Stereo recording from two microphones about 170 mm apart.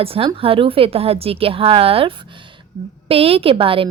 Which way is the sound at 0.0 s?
35° right (ahead or behind).